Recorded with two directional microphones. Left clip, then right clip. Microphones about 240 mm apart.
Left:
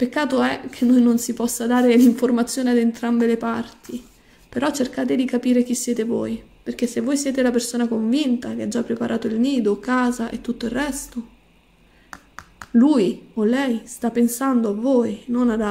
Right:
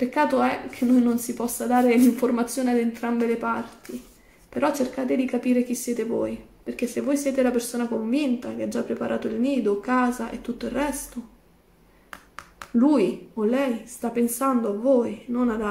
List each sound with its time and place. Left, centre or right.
0.0 s speech: left
12.1 s finger snapping: centre
12.7 s speech: left